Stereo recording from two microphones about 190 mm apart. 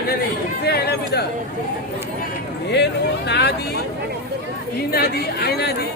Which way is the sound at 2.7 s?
65° left (ahead or behind).